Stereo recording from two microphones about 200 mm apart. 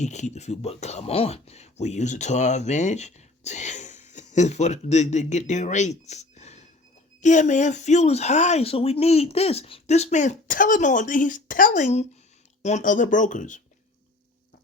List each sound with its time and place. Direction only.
0.0 s speech: 35° left (ahead or behind)